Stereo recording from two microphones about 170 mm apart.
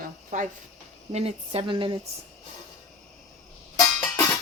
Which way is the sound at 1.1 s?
35° right (ahead or behind).